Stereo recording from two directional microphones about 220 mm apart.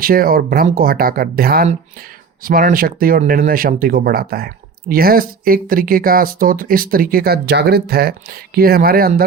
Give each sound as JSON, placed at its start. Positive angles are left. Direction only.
{"t": 0.0, "sound": "speech", "side_deg": -40}